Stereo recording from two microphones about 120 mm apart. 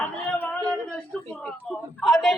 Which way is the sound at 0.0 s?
15° left (ahead or behind).